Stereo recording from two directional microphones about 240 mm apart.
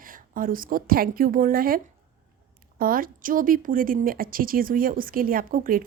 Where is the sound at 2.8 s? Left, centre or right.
Right.